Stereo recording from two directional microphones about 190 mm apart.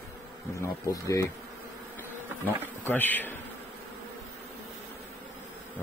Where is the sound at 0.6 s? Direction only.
15° left (ahead or behind).